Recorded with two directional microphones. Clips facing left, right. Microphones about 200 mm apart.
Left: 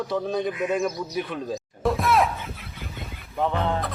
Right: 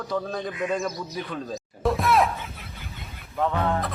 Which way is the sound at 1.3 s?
Centre (ahead or behind).